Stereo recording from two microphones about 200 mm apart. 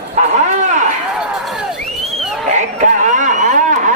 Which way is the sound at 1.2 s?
5° right (ahead or behind).